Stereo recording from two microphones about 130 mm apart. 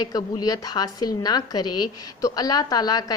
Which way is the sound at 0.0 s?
30° left (ahead or behind).